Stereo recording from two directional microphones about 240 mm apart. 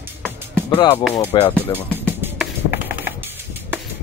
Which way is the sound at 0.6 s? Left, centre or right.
Centre.